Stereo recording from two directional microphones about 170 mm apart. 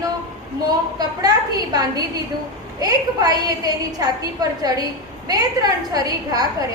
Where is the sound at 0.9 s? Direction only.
25° right (ahead or behind).